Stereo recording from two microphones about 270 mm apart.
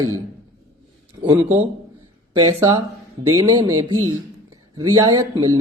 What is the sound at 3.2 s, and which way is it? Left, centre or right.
Speech, centre.